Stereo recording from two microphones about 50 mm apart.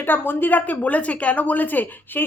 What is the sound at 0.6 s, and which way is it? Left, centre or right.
Speech, left.